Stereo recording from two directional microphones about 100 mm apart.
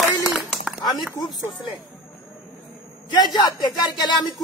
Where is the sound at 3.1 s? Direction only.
45° left (ahead or behind).